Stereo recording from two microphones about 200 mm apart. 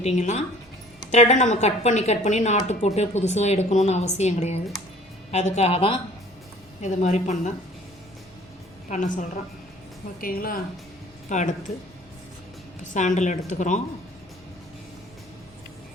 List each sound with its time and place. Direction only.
0.0 s a woman's voice: 35° left (ahead or behind)
8.9 s a woman's voice: 40° left (ahead or behind)
12.9 s a woman's voice: 40° left (ahead or behind)